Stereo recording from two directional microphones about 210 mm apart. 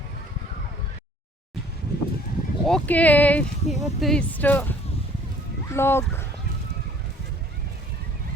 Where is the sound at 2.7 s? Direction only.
5° left (ahead or behind).